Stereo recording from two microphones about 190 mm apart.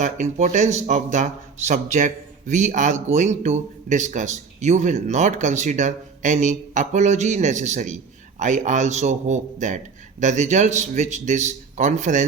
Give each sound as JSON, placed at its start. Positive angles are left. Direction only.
{"t": 0.0, "sound": "speech", "side_deg": -40}